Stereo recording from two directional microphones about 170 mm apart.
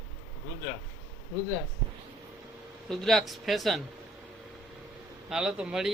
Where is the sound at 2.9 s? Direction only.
Centre (ahead or behind).